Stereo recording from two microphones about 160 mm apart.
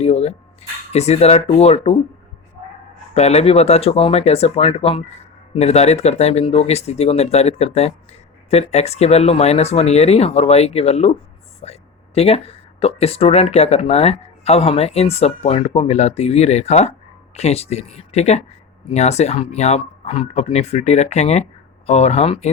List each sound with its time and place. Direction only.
0.0 s speech: 40° left (ahead or behind)
3.2 s speech: 40° left (ahead or behind)